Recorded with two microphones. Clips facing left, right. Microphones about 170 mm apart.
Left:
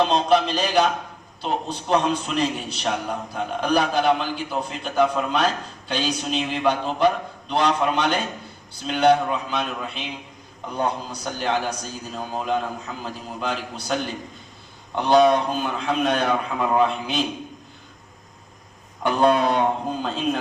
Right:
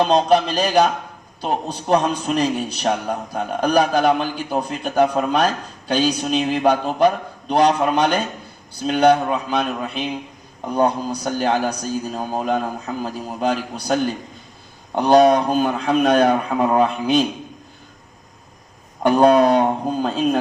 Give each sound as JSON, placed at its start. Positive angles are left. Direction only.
{"t": 0.0, "sound": "a man's voice", "side_deg": -45}
{"t": 19.0, "sound": "a man's voice", "side_deg": -40}